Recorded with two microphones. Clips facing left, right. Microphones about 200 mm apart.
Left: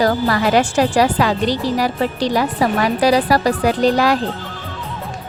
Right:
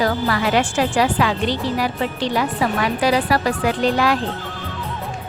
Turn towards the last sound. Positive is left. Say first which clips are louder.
# left 3 dB
turn(degrees=40)  # may be behind; listen again after turning